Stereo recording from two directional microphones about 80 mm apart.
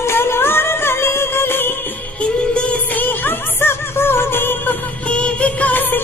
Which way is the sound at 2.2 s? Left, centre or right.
Centre.